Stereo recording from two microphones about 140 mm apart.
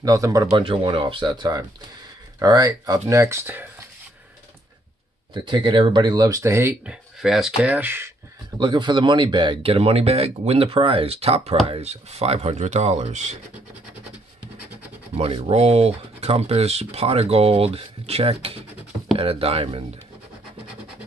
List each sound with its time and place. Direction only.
0.0 s speech: 25° right (ahead or behind)
0.7 s speech: 35° right (ahead or behind); by 3.6 s 15° right (ahead or behind)
5.3 s speech: 35° right (ahead or behind); by 8.1 s 15° right (ahead or behind)
8.5 s speech: 35° right (ahead or behind); by 13.4 s 55° right (ahead or behind)
15.1 s speech: 45° right (ahead or behind)